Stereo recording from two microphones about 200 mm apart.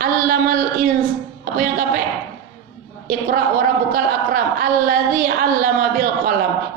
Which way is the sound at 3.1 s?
45° right (ahead or behind).